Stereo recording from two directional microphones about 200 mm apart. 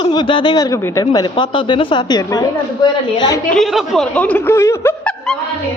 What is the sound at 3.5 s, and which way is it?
Speech, centre (ahead or behind).